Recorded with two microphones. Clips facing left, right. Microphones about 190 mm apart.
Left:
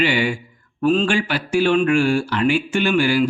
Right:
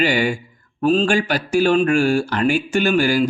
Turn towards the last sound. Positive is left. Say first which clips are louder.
# right 1 dB
turn(degrees=-40)  # may be behind; listen again after turning